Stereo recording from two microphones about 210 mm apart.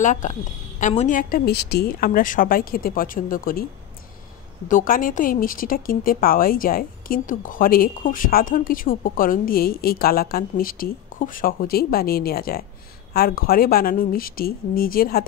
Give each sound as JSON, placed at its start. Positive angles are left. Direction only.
{"t": 0.0, "sound": "speech", "side_deg": 35}
{"t": 4.6, "sound": "speech", "side_deg": 40}